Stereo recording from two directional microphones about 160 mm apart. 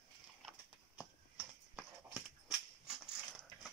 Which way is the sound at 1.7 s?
5° right (ahead or behind).